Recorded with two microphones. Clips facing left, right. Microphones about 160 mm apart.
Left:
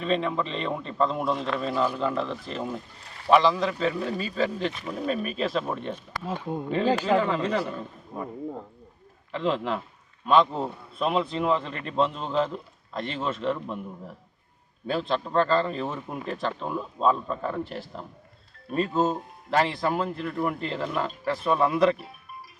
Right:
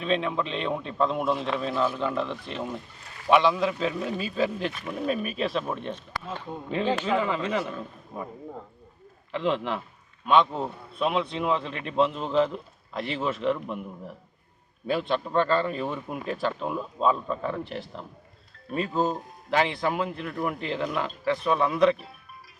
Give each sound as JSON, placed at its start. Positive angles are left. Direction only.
{"t": 0.0, "sound": "a man's voice", "side_deg": 0}
{"t": 6.8, "sound": "speech", "side_deg": 40}
{"t": 7.2, "sound": "a man's voice", "side_deg": 0}
{"t": 9.3, "sound": "a man's voice", "side_deg": 0}
{"t": 14.8, "sound": "a man's voice", "side_deg": -5}